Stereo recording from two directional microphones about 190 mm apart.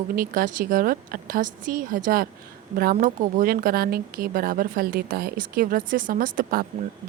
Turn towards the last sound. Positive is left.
turn(degrees=-50)  # may be behind; listen again after turning